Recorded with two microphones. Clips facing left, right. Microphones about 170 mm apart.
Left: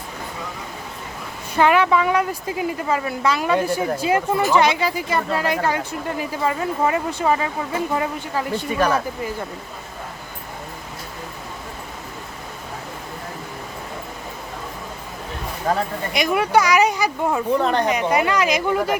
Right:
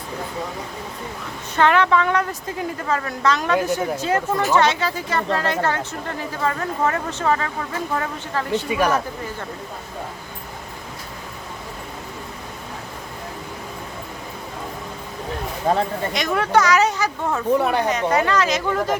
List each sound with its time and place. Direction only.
1.5 s a woman's voice: 10° left (ahead or behind)
15.7 s speech: 25° right (ahead or behind)
16.1 s a woman's voice: 10° left (ahead or behind)
17.5 s speech: 10° right (ahead or behind)
17.8 s a woman's voice: 10° left (ahead or behind)